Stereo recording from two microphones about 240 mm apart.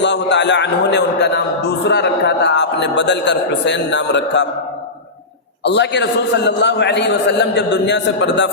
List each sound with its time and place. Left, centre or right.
0.0 s a man's voice: left
5.6 s a man's voice: left